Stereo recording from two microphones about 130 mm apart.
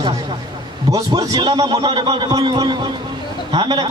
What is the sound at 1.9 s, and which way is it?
A man's voice, 40° right (ahead or behind).